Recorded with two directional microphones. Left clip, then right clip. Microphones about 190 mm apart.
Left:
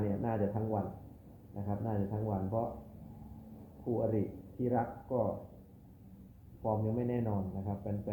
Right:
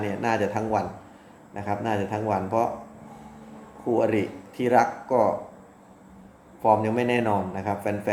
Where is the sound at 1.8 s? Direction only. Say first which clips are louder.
Right 12 dB; 40° right (ahead or behind).